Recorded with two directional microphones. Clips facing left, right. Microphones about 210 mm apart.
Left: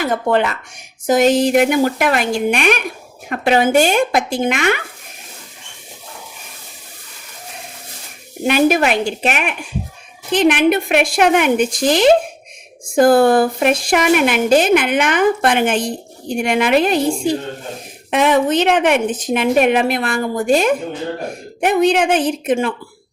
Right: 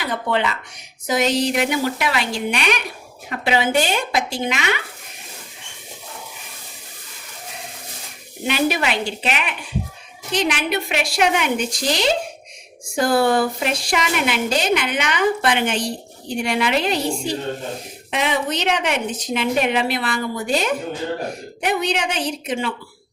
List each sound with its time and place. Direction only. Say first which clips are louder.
0.0 s a woman's voice: left 6 dB; 45° left (ahead or behind)
8.4 s a woman's voice: left 7 dB; 50° left (ahead or behind)